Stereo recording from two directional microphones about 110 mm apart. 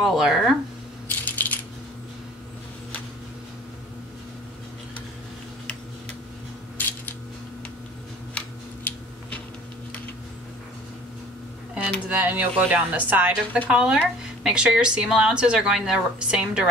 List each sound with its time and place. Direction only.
0.0 s speech: centre (ahead or behind)
1.2 s coin: 15° left (ahead or behind)
6.8 s a sound: 15° left (ahead or behind)
8.4 s tick-tock: 10° left (ahead or behind)
12.1 s speech: 15° right (ahead or behind)